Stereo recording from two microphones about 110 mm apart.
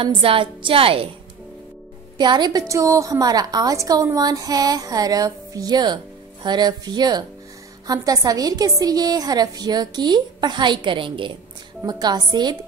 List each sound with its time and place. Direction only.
0.0 s a woman's voice: 55° right (ahead or behind)
2.1 s a woman's voice: 40° right (ahead or behind)
2.7 s a woman's voice: 30° right (ahead or behind); by 11.3 s 50° right (ahead or behind)
11.8 s a woman's voice: 40° right (ahead or behind)